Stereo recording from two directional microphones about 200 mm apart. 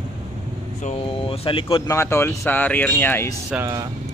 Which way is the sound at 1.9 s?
15° left (ahead or behind).